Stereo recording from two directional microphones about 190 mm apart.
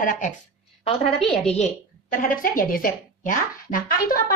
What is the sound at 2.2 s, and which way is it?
A woman's voice, 50° left (ahead or behind).